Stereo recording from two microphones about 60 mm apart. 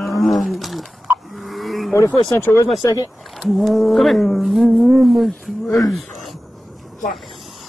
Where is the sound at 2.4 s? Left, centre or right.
Left.